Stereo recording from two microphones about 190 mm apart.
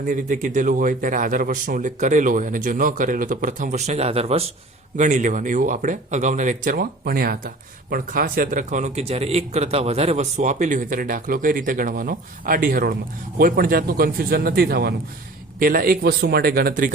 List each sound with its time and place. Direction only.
0.1 s speech: 45° right (ahead or behind)